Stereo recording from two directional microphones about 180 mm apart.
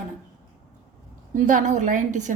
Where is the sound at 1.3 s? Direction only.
45° right (ahead or behind).